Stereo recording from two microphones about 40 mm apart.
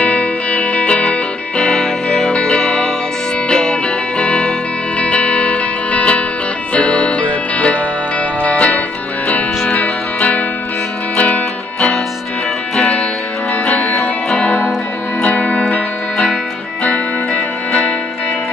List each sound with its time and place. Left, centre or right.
0.0 s music: left
13.7 s music: left
16.8 s music: left